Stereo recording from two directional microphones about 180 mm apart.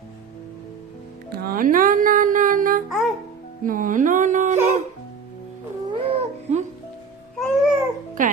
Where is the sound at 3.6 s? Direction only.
50° right (ahead or behind).